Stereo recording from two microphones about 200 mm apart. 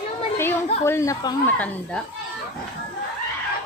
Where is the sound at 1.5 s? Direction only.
5° left (ahead or behind).